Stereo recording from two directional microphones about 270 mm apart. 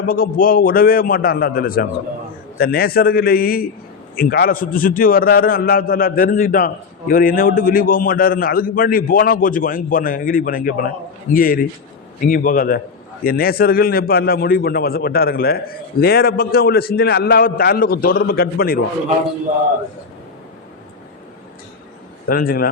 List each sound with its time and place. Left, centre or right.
0.1 s a man's voice: left
22.3 s a man's voice: left